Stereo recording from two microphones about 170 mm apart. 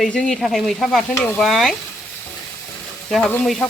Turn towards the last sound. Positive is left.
turn(degrees=5)  # may be behind; listen again after turning